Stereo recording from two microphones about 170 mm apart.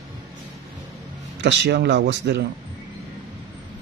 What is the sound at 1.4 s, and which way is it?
Speech, 90° right.